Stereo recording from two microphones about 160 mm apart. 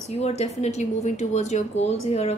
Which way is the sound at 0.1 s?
40° left (ahead or behind).